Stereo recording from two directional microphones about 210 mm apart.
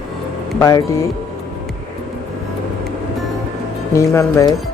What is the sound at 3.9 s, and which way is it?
Speech, 15° left (ahead or behind).